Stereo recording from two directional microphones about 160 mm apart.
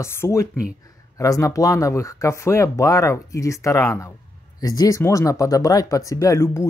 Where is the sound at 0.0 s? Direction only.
15° left (ahead or behind).